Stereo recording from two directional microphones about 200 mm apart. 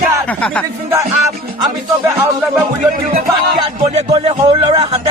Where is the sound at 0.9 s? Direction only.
15° right (ahead or behind).